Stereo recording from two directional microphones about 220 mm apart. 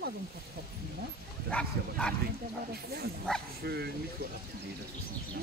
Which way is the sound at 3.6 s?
45° right (ahead or behind).